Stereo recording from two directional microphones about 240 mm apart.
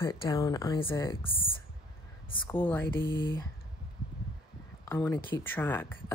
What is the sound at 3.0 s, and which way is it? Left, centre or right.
Speech, centre.